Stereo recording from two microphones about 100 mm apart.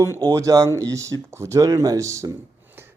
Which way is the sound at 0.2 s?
40° right (ahead or behind).